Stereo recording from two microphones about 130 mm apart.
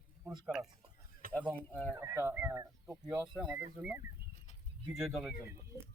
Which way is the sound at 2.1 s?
15° right (ahead or behind).